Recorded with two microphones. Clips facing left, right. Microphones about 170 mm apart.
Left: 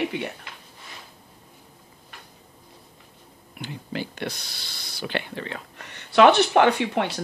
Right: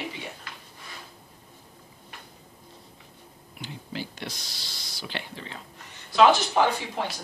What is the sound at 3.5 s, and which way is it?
Speech, 60° left (ahead or behind).